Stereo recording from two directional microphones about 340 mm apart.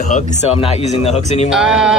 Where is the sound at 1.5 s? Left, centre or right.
Centre.